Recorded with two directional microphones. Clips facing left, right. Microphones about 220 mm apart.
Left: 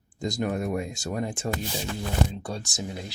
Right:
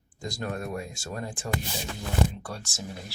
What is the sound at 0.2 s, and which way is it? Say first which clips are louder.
Speech: left 6 dB; 20° left (ahead or behind).